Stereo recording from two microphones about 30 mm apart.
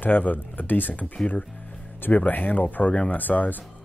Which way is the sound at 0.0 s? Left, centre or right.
Left.